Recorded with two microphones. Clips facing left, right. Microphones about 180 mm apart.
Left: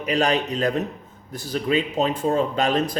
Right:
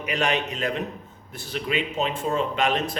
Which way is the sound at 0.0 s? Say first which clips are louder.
Left 4 dB; 35° left (ahead or behind).